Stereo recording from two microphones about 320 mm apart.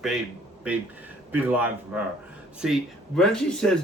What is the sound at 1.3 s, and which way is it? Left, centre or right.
Speech, centre.